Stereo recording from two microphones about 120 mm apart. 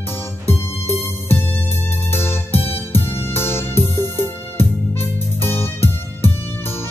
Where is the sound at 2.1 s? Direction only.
20° left (ahead or behind).